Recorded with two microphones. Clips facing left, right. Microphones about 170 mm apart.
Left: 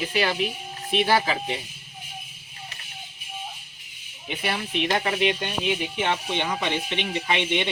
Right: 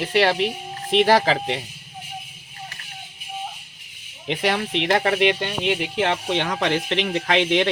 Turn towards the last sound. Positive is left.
turn(degrees=-90)